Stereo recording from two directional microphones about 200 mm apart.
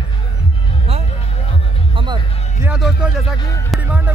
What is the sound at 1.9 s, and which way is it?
Music, 20° right (ahead or behind).